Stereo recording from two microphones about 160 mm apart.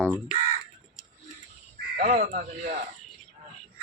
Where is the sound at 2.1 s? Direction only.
50° right (ahead or behind).